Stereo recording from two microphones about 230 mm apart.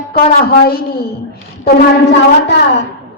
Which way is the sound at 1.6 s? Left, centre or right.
Left.